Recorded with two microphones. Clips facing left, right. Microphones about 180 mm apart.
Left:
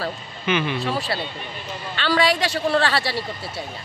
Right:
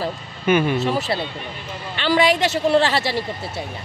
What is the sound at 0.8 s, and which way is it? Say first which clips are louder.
Speech: right 3 dB; 20° right (ahead or behind).